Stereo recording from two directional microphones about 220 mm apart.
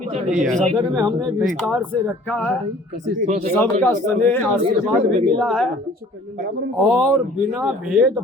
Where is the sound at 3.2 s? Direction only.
35° right (ahead or behind).